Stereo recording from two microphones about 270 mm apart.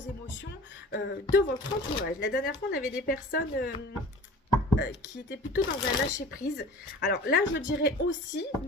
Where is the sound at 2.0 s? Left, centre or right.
Left.